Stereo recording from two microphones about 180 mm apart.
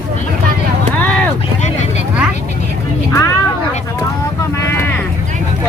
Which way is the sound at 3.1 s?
20° left (ahead or behind).